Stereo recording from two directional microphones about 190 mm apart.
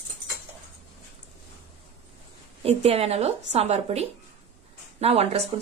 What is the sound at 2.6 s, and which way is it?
Speech, 30° right (ahead or behind).